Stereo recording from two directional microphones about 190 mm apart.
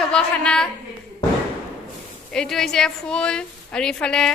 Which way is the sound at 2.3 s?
5° left (ahead or behind).